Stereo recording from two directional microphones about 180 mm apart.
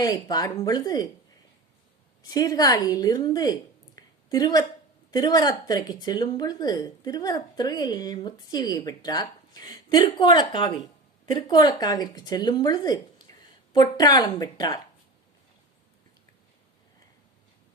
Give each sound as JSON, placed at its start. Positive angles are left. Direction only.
{"t": 0.0, "sound": "speech", "side_deg": 20}
{"t": 2.3, "sound": "speech", "side_deg": 20}
{"t": 3.9, "sound": "a sound", "side_deg": 20}
{"t": 5.1, "sound": "speech", "side_deg": 20}